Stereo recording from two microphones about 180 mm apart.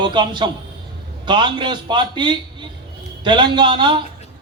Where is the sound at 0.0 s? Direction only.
25° right (ahead or behind).